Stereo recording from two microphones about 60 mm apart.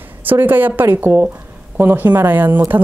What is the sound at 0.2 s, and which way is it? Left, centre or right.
A woman's voice, right.